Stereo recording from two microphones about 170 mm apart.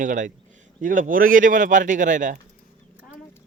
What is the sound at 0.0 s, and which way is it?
Speech, 50° right (ahead or behind).